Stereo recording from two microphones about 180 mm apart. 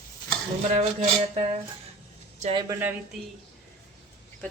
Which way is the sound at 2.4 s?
30° right (ahead or behind).